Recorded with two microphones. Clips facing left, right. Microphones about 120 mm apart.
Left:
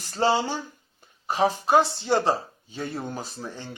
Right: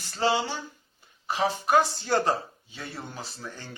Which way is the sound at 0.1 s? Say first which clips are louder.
Left 3 dB; 35° left (ahead or behind).